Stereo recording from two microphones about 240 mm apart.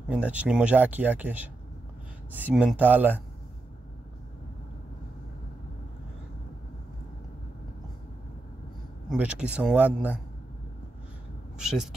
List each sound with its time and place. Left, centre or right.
0.1 s speech: centre
9.1 s speech: centre
11.6 s speech: centre